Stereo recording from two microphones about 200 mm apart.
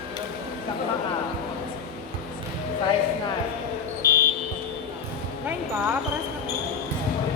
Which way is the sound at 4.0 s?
15° right (ahead or behind).